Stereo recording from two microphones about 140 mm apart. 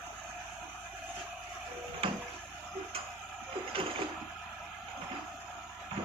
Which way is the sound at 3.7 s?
40° right (ahead or behind).